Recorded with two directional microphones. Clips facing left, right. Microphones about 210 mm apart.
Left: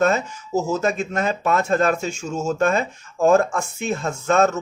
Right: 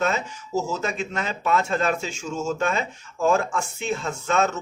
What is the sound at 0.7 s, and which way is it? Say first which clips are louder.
A man's voice: left 6 dB; 45° left (ahead or behind).